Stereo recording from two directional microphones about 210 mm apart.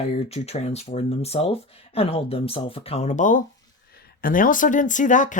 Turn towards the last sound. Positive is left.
turn(degrees=35)  # may be behind; listen again after turning